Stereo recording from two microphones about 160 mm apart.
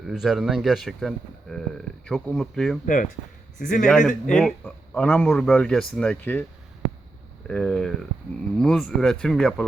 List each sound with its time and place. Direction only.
0.1 s speech: centre (ahead or behind)
2.8 s speech: 55° left (ahead or behind)
3.8 s speech: 5° left (ahead or behind)
7.4 s speech: 5° left (ahead or behind)